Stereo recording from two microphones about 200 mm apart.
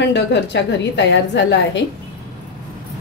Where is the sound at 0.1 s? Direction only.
60° left (ahead or behind).